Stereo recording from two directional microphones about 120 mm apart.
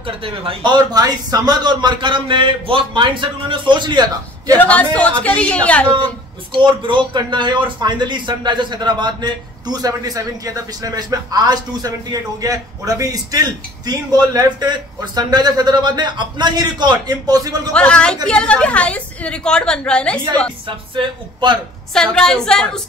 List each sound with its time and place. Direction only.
0.0 s speech: 50° right (ahead or behind)
0.9 s speech: 35° right (ahead or behind)
4.6 s a woman's voice: 10° left (ahead or behind)
6.6 s speech: 40° right (ahead or behind)
17.7 s a woman's voice: 10° left (ahead or behind)
20.6 s speech: 45° right (ahead or behind)
21.9 s a woman's voice: 5° left (ahead or behind)